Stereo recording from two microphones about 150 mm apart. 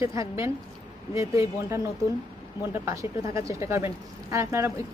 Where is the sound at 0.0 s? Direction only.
20° right (ahead or behind).